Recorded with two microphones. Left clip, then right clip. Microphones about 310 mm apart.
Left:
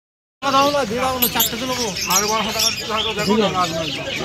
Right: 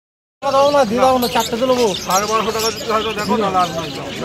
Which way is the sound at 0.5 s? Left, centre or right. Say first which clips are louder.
Right 4 dB; right.